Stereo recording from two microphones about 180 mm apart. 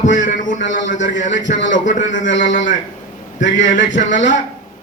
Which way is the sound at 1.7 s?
45° left (ahead or behind).